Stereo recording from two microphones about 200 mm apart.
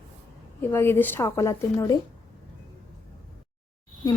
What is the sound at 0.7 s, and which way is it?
A woman's voice, 10° left (ahead or behind).